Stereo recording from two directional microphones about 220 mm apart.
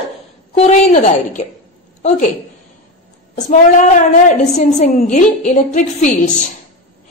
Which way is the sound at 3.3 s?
35° left (ahead or behind).